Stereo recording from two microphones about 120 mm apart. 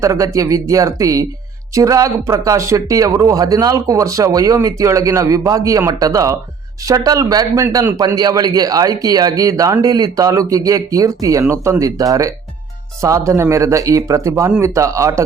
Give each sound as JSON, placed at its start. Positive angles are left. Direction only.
{"t": 0.0, "sound": "speech", "side_deg": -25}